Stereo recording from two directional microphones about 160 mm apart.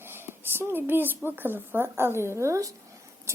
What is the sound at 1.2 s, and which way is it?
Speech, 15° right (ahead or behind).